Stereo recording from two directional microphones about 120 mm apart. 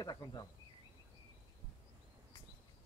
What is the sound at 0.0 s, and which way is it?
Speech, 35° left (ahead or behind).